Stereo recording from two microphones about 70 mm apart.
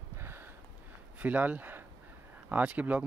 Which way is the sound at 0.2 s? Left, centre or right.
Right.